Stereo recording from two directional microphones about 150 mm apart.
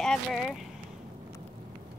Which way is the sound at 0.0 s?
5° left (ahead or behind).